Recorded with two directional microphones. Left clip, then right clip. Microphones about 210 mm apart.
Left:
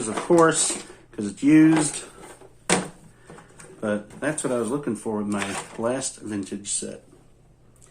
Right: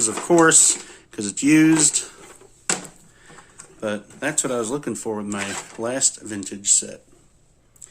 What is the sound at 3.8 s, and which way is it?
Speech, 50° right (ahead or behind).